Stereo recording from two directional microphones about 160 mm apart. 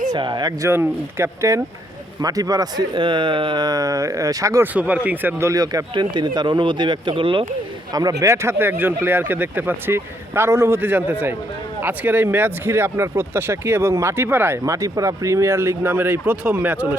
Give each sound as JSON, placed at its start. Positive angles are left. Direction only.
{"t": 0.1, "sound": "speech", "side_deg": -30}
{"t": 8.2, "sound": "speech", "side_deg": -15}